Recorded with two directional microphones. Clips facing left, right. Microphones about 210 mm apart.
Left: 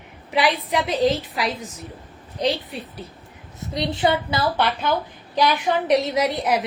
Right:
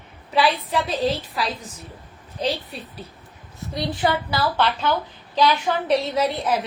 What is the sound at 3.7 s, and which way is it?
A woman's voice, 20° left (ahead or behind).